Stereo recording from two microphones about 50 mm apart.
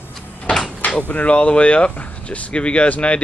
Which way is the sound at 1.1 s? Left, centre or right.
Left.